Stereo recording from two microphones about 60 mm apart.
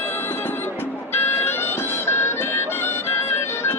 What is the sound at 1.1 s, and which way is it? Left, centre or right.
Music, left.